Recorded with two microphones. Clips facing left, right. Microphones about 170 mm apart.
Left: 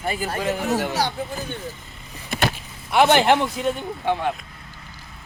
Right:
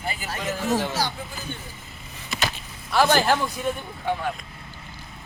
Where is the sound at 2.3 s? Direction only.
55° left (ahead or behind).